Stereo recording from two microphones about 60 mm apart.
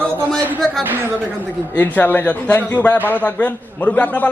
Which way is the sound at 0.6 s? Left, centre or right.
Centre.